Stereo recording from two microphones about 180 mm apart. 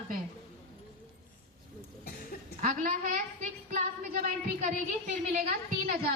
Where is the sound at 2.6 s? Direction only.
50° right (ahead or behind).